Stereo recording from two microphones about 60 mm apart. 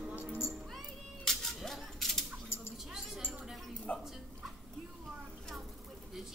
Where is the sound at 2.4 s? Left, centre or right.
Left.